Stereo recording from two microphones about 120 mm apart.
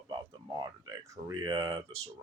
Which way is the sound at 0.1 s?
35° right (ahead or behind).